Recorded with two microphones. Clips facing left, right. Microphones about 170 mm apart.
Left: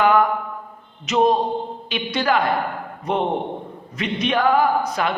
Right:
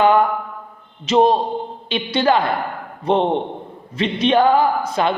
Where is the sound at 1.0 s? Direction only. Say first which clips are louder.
Right 3 dB; 30° right (ahead or behind).